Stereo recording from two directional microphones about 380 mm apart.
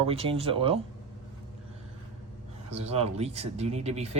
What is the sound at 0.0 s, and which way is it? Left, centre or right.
Speech, centre.